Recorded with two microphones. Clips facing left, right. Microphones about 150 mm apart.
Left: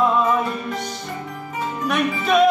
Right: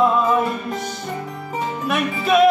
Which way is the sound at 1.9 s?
Centre (ahead or behind).